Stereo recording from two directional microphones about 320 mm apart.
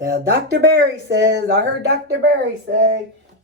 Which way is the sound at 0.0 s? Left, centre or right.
Right.